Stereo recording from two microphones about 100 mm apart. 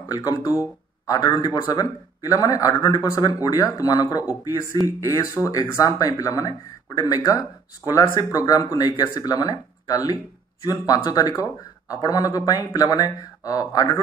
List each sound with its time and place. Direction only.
0.1 s a man's voice: 40° left (ahead or behind)